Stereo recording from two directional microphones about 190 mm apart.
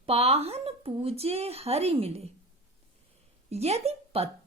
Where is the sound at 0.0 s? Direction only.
35° right (ahead or behind).